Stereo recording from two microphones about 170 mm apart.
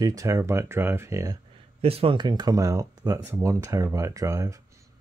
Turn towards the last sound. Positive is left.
turn(degrees=-20)  # may be behind; listen again after turning